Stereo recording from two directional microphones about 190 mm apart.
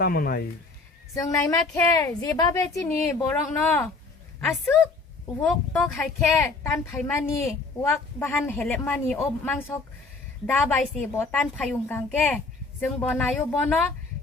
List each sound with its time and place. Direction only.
0.0 s speech: 55° left (ahead or behind)
1.3 s a woman's voice: 15° left (ahead or behind)